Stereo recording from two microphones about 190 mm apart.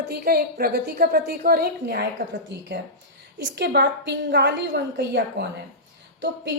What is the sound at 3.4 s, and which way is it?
A woman's voice, 60° right (ahead or behind).